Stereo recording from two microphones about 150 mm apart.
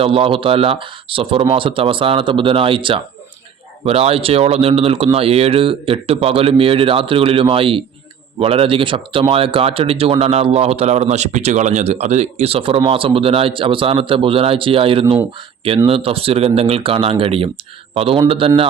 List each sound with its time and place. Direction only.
0.0 s speech: 35° right (ahead or behind)